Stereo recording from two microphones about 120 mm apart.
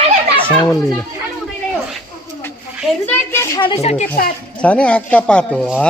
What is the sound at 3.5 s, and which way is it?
Speech, 45° left (ahead or behind).